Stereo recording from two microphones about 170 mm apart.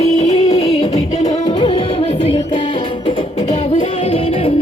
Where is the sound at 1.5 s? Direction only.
30° left (ahead or behind).